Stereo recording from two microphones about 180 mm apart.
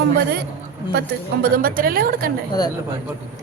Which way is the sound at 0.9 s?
55° right (ahead or behind).